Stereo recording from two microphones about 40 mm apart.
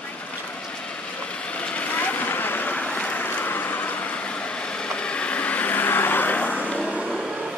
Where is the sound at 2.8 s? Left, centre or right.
Left.